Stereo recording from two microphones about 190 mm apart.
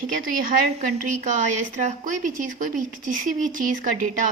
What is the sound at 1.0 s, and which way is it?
A woman's voice, 40° right (ahead or behind).